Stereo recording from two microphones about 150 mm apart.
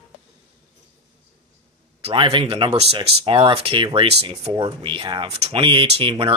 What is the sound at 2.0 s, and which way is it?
Speech, 35° right (ahead or behind).